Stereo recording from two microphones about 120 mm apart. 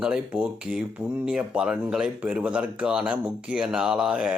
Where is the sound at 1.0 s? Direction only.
20° right (ahead or behind).